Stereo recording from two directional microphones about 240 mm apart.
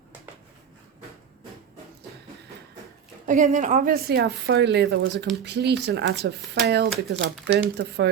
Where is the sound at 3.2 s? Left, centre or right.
Right.